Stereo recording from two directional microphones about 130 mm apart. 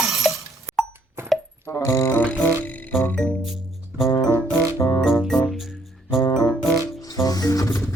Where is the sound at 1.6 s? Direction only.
20° left (ahead or behind).